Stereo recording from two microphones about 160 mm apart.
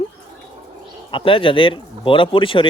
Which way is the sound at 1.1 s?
35° left (ahead or behind).